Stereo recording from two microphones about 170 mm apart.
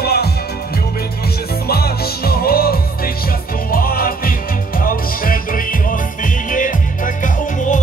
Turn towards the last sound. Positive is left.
turn(degrees=50)  # may be behind; listen again after turning